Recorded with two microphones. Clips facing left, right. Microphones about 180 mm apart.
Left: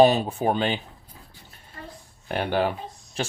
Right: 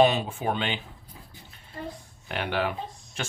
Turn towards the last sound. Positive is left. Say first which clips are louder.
# left 4 dB
turn(degrees=35)  # may be behind; listen again after turning